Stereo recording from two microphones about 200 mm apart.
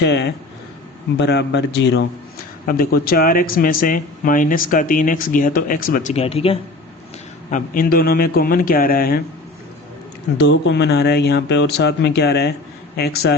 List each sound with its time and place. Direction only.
0.0 s speech: 55° left (ahead or behind)
2.6 s speech: 45° left (ahead or behind); by 6.6 s 30° left (ahead or behind)
7.5 s speech: 45° left (ahead or behind)
10.3 s speech: 65° left (ahead or behind)